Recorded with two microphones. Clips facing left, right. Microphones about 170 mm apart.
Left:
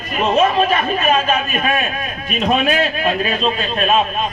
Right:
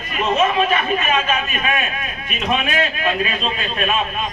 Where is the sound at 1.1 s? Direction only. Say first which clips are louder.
Left 4 dB; 35° left (ahead or behind).